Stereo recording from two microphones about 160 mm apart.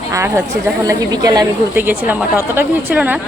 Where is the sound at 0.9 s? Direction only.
25° right (ahead or behind).